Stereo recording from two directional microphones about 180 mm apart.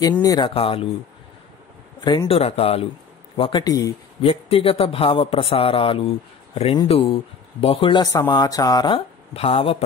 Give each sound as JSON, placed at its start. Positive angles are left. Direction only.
{"t": 0.2, "sound": "speech", "side_deg": 20}
{"t": 0.6, "sound": "speech", "side_deg": 30}
{"t": 2.0, "sound": "speech", "side_deg": 25}
{"t": 2.3, "sound": "speech", "side_deg": 35}
{"t": 4.2, "sound": "speech", "side_deg": 30}